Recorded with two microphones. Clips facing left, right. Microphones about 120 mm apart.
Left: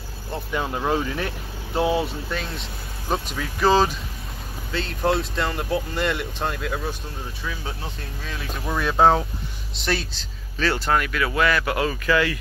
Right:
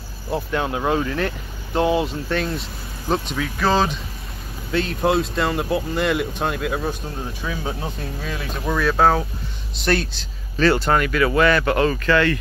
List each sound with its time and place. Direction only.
0.3 s speech: 5° right (ahead or behind); by 3.9 s 15° left (ahead or behind)
4.7 s speech: 5° right (ahead or behind)
8.6 s speech: 10° left (ahead or behind)
9.8 s speech: centre (ahead or behind)